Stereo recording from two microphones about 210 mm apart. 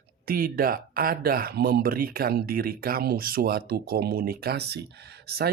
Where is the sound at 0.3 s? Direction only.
45° right (ahead or behind).